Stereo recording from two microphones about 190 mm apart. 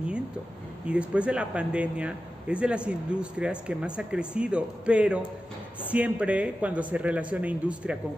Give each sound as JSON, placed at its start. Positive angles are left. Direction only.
{"t": 0.8, "sound": "a man's voice", "side_deg": -5}